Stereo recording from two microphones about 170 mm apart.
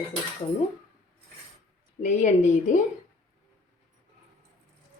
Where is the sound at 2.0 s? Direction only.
45° left (ahead or behind).